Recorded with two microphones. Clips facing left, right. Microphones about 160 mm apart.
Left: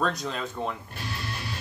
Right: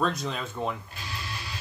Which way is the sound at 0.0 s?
Centre (ahead or behind).